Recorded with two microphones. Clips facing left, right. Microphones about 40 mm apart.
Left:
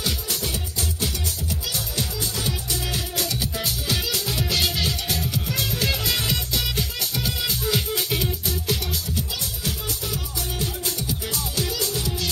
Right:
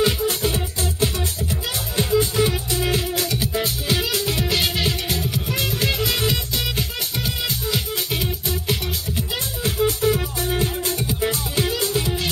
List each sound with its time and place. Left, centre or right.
0.0 s music: right; by 7.3 s centre
7.6 s music: centre
8.5 s music: right
9.7 s music: right